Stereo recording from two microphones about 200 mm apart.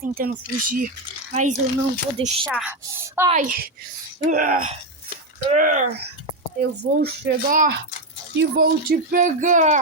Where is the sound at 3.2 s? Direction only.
40° right (ahead or behind).